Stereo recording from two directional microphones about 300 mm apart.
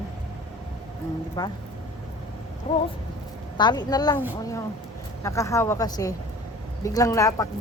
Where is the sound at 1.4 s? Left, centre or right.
Centre.